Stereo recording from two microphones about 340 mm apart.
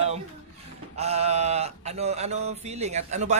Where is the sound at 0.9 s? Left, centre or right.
Centre.